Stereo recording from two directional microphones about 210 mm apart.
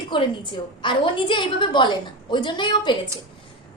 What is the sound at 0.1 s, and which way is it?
A woman's voice, 20° left (ahead or behind).